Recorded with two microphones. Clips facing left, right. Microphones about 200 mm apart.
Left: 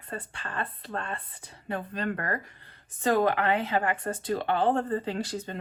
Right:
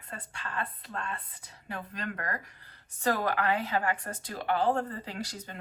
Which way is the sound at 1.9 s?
30° left (ahead or behind).